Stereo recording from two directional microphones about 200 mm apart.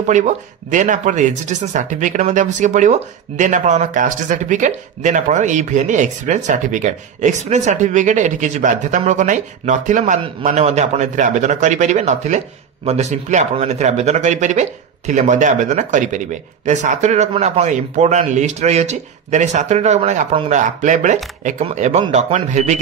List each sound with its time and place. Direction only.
0.1 s speech: 35° right (ahead or behind)